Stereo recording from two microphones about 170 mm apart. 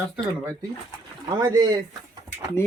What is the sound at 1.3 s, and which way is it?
Speech, 20° right (ahead or behind).